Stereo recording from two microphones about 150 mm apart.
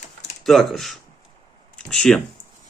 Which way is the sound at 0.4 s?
Centre (ahead or behind).